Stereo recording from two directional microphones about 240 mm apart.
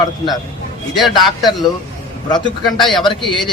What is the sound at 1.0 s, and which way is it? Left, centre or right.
Speech, centre.